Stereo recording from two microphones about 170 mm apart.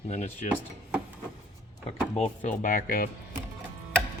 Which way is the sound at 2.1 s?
45° left (ahead or behind).